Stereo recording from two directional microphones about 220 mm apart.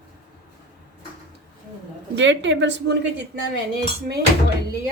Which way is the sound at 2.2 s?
55° right (ahead or behind).